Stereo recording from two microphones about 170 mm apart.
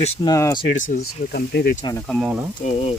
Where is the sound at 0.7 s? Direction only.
50° left (ahead or behind).